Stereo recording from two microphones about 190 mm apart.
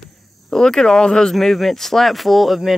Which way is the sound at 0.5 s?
5° left (ahead or behind).